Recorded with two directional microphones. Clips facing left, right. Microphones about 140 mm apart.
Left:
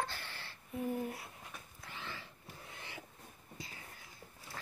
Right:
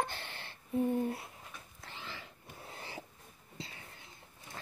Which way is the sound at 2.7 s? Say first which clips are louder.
Right 5 dB; 35° right (ahead or behind).